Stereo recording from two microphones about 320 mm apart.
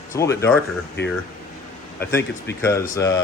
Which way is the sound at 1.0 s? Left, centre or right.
Left.